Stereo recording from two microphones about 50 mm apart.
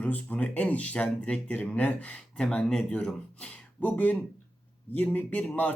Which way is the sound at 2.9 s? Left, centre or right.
Left.